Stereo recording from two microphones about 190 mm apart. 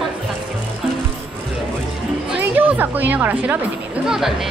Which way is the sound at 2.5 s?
10° right (ahead or behind).